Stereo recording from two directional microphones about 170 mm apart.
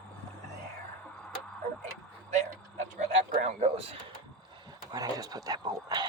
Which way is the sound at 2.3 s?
45° right (ahead or behind).